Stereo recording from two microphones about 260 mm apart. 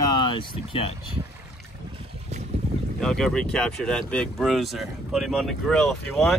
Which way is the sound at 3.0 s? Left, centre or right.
Centre.